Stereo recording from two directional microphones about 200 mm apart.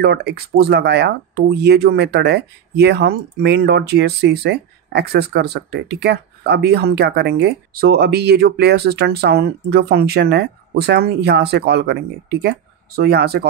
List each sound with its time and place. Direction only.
0.0 s speech: 55° right (ahead or behind)